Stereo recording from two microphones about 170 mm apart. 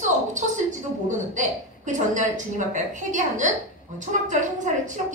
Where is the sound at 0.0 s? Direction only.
45° right (ahead or behind).